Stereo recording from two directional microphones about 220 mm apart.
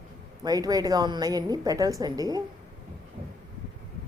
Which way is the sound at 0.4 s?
15° right (ahead or behind).